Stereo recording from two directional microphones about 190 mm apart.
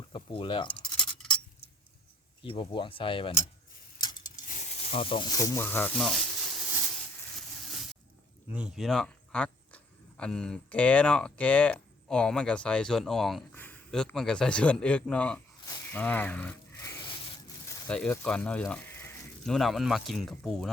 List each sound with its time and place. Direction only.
0.1 s speech: 25° left (ahead or behind)
0.7 s scratch: 5° left (ahead or behind)
2.4 s speech: 25° left (ahead or behind)
4.4 s speech: 40° left (ahead or behind); by 6.2 s centre (ahead or behind)
8.5 s speech: 5° right (ahead or behind)
15.6 s a sound: 10° left (ahead or behind)
17.8 s speech: 5° left (ahead or behind)